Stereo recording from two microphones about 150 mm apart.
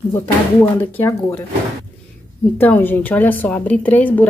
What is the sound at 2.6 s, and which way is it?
Speech, 15° left (ahead or behind).